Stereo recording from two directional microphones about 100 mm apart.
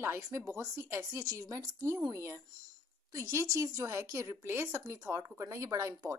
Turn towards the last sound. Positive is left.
turn(degrees=-35)  # may be behind; listen again after turning